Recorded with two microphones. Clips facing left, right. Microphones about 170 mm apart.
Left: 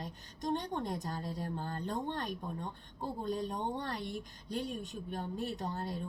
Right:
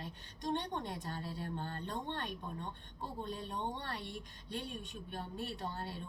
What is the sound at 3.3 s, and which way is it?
Speech, 40° left (ahead or behind).